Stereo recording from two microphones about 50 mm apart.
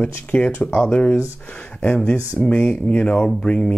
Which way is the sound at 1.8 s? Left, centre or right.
Left.